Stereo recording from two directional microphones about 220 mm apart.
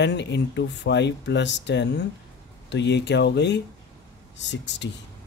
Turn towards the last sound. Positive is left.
turn(degrees=55)  # may be behind; listen again after turning